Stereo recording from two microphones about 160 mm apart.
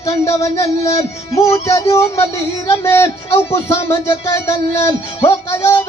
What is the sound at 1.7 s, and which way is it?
A man's voice, 20° left (ahead or behind).